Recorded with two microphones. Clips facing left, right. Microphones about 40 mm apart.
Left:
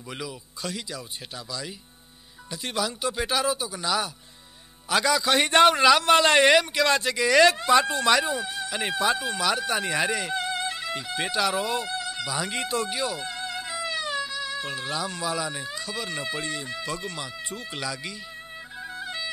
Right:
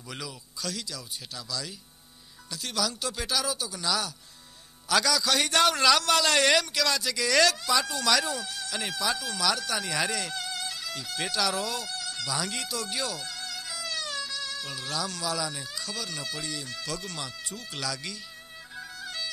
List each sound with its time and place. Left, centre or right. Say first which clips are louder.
0.6 s speech: left 2 dB; left
7.2 s speech: left 5 dB; left
7.5 s speech: left 7 dB; left
18.8 s music: left 4 dB; left